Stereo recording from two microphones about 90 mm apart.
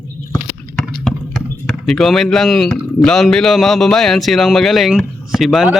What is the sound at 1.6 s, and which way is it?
A man's voice, centre (ahead or behind).